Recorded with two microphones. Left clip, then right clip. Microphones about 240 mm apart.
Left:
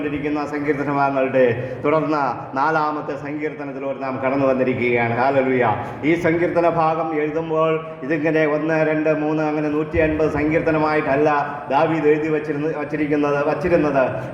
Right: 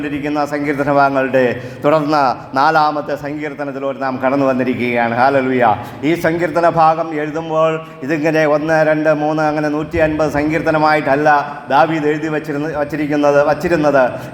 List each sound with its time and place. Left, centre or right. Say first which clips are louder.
0.3 s a man's voice: right 6 dB; right